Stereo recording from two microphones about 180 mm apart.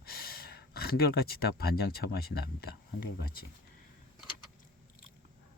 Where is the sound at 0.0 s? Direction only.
60° left (ahead or behind).